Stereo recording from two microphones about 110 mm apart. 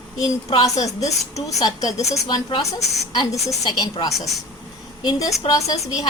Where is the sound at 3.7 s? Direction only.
40° left (ahead or behind).